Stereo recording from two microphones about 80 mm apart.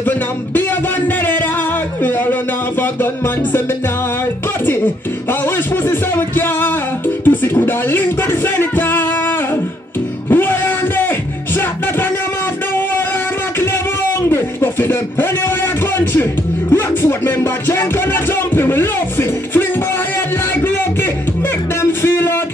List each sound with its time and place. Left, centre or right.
0.6 s a sound: left
2.0 s speech: left
5.9 s music: left
10.3 s music: left
14.3 s a sound: left
16.7 s music: left
22.0 s music: left